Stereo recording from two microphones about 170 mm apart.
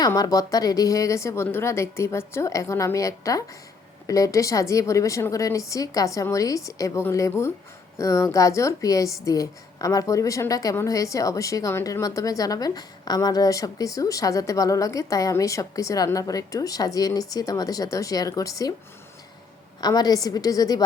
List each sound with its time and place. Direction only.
0.0 s a woman's voice: 20° left (ahead or behind)
19.8 s a woman's voice: 25° left (ahead or behind)